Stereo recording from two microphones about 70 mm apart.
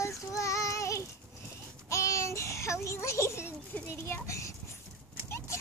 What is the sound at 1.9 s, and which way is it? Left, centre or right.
A child's voice, left.